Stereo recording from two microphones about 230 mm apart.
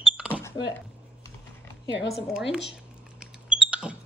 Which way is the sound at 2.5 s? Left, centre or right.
Centre.